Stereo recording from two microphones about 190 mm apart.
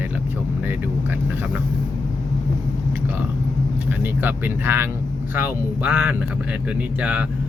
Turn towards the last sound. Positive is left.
turn(degrees=-5)  # may be behind; listen again after turning